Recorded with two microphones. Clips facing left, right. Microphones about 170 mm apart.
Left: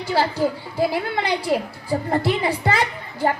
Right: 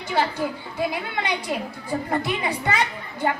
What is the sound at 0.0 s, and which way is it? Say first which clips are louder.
A child's voice: left 4 dB; 35° left (ahead or behind).